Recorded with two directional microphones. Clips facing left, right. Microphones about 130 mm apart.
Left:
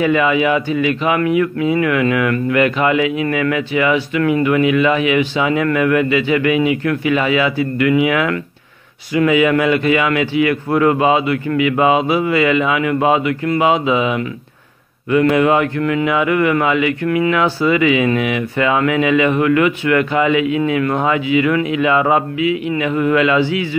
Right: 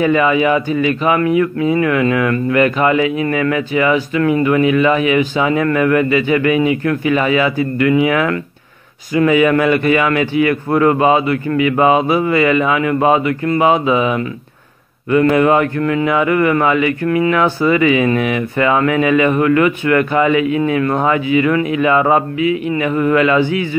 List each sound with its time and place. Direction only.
0.0 s speech: 35° right (ahead or behind)